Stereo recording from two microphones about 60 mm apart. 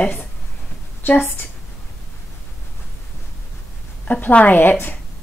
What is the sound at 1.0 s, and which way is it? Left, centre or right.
Speech, left.